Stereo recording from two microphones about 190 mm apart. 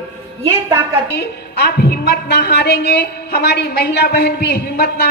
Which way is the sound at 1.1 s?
60° left (ahead or behind).